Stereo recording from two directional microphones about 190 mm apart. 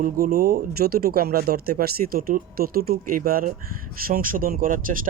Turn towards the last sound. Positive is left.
turn(degrees=-45)  # may be behind; listen again after turning